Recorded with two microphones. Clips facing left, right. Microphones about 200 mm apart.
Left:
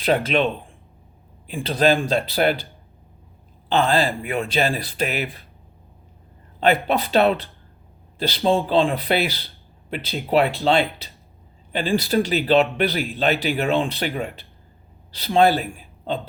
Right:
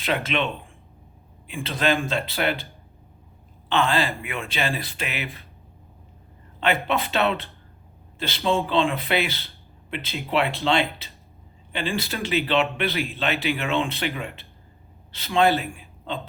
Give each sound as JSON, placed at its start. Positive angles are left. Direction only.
{"t": 0.1, "sound": "speech", "side_deg": 35}
{"t": 3.7, "sound": "speech", "side_deg": 35}
{"t": 6.8, "sound": "speech", "side_deg": 35}